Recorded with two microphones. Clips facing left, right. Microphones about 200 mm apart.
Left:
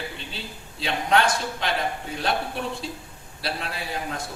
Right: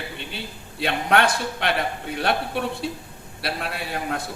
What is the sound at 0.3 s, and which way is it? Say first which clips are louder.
A man's voice: right 2 dB; 60° right (ahead or behind).